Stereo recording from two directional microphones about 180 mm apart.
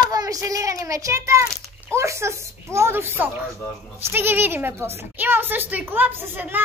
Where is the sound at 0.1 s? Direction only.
20° right (ahead or behind).